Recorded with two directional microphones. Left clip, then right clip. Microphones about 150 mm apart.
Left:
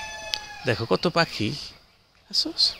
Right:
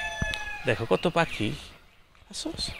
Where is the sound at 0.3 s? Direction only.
70° left (ahead or behind).